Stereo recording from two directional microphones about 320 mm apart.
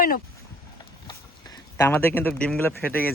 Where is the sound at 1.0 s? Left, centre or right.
Centre.